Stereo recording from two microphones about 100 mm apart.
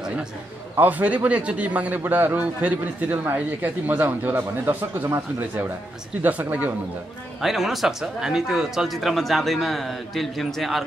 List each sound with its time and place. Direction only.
0.0 s a sound: 5° right (ahead or behind)
0.7 s a man's voice: 15° right (ahead or behind)
7.3 s speech: centre (ahead or behind)